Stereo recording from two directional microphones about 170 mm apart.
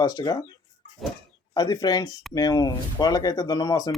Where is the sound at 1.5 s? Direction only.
25° left (ahead or behind).